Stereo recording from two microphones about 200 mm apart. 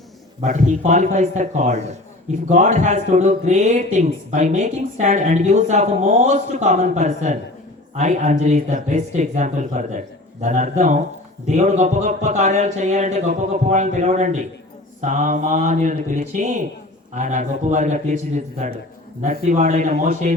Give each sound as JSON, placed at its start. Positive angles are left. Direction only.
{"t": 0.4, "sound": "speech", "side_deg": -40}